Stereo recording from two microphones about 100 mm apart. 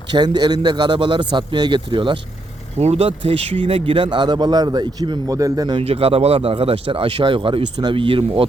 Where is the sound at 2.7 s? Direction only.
90° right; by 5.8 s 40° right (ahead or behind).